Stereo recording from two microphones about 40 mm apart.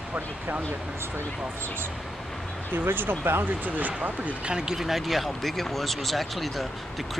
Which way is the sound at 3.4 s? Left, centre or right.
Right.